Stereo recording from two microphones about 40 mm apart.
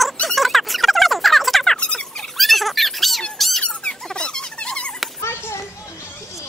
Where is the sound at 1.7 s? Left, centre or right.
Left.